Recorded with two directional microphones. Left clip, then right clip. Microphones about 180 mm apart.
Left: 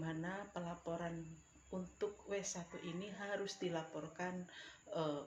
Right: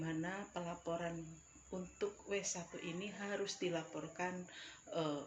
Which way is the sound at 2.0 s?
15° right (ahead or behind).